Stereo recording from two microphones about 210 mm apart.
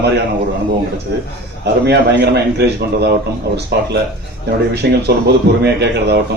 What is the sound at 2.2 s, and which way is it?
Speech, 50° right (ahead or behind).